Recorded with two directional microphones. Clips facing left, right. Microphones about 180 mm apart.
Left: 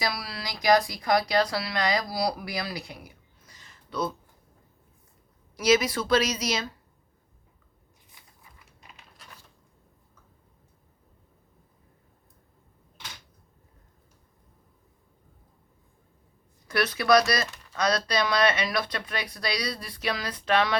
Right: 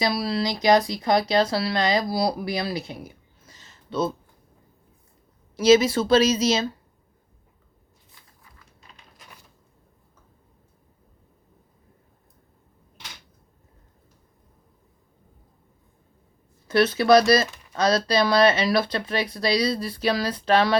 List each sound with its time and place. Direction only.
0.0 s speech: 25° right (ahead or behind)
5.5 s speech: 25° right (ahead or behind)
8.5 s typing: 10° left (ahead or behind)
16.6 s speech: 25° right (ahead or behind)